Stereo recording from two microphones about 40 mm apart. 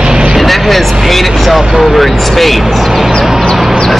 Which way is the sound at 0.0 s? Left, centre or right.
Centre.